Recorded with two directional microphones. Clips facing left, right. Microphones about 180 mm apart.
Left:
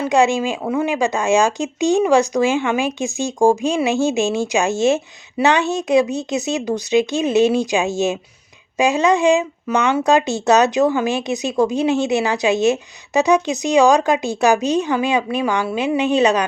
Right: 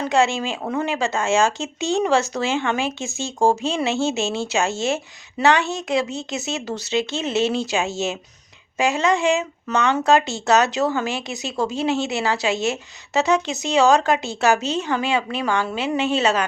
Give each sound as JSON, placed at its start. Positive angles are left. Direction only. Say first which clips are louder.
{"t": 0.0, "sound": "speech", "louder": "left 4 dB", "side_deg": 15}